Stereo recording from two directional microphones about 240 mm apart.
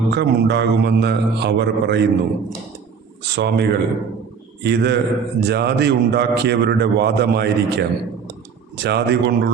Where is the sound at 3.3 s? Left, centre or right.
Right.